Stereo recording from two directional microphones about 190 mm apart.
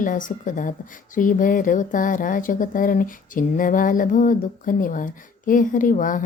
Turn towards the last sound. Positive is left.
turn(degrees=45)  # may be behind; listen again after turning